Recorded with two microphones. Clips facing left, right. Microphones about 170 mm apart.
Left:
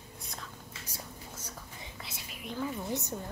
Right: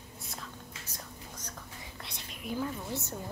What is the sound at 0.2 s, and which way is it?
Whispering, centre (ahead or behind).